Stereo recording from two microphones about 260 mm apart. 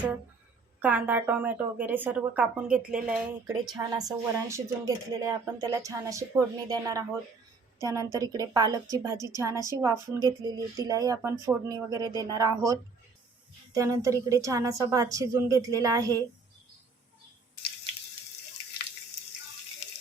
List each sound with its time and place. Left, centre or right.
0.8 s speech: centre
3.8 s speech: centre